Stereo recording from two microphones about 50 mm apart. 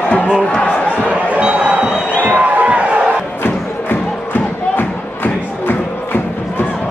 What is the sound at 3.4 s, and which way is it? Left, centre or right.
Music, left.